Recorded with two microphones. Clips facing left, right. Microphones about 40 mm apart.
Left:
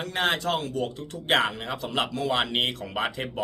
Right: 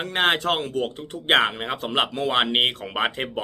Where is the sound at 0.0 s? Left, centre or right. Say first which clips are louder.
Right 4 dB; right.